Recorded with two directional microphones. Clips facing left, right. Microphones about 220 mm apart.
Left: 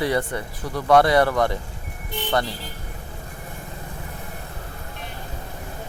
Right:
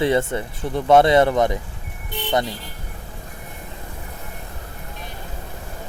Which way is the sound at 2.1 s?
Centre (ahead or behind).